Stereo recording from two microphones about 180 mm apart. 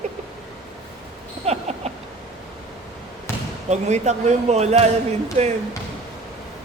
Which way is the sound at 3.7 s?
40° right (ahead or behind).